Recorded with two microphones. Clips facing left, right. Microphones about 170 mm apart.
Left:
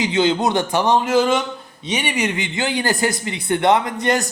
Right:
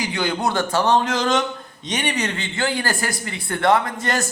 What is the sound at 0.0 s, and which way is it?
A man's voice, 20° left (ahead or behind).